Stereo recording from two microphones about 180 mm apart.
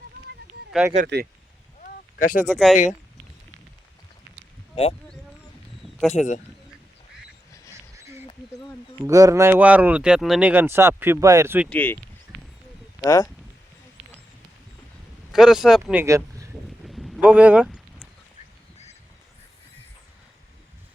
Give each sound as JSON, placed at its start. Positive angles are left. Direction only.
{"t": 1.0, "sound": "speech", "side_deg": -70}
{"t": 1.8, "sound": "a sound", "side_deg": 50}
{"t": 2.5, "sound": "speech", "side_deg": 0}
{"t": 4.7, "sound": "speech", "side_deg": 30}
{"t": 6.1, "sound": "speech", "side_deg": 40}
{"t": 9.0, "sound": "speech", "side_deg": -20}
{"t": 11.7, "sound": "speech", "side_deg": 10}
{"t": 13.0, "sound": "speech", "side_deg": 15}
{"t": 15.3, "sound": "speech", "side_deg": 0}
{"t": 16.8, "sound": "a sound", "side_deg": 0}